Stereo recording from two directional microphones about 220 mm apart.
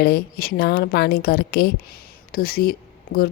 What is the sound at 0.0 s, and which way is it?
A woman's voice, 45° left (ahead or behind).